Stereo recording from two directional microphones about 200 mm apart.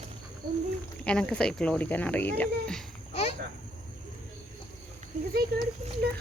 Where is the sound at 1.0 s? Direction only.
5° left (ahead or behind).